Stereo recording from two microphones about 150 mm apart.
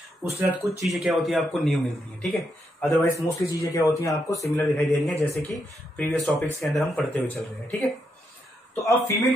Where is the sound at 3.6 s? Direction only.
20° left (ahead or behind).